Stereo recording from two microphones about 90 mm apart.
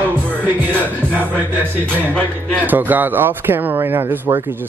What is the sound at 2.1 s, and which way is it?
Speech, 15° left (ahead or behind).